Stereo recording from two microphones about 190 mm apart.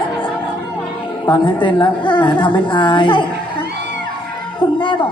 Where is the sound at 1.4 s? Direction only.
25° left (ahead or behind).